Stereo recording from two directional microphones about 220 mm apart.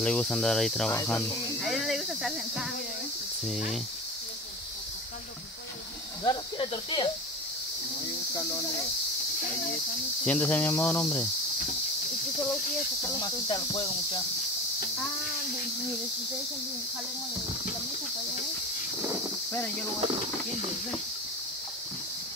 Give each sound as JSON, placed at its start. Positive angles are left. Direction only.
{"t": 0.0, "sound": "speech", "side_deg": 5}
{"t": 6.2, "sound": "cricket", "side_deg": 20}
{"t": 10.2, "sound": "cricket", "side_deg": 5}
{"t": 13.0, "sound": "cricket", "side_deg": 20}